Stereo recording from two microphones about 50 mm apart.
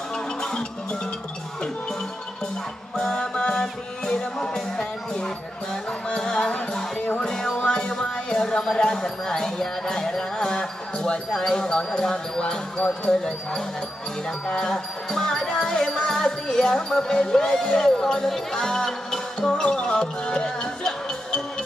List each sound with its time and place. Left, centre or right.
0.4 s music: centre
2.9 s music: centre
11.3 s speech: centre
14.4 s music: centre